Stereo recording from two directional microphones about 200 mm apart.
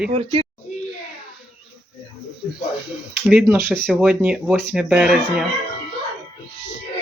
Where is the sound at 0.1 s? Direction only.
30° right (ahead or behind).